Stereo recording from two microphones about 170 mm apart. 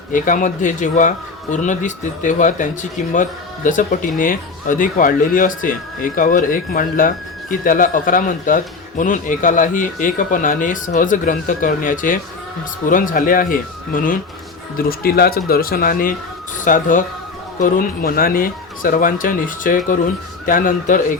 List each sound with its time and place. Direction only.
0.1 s speech: 50° left (ahead or behind)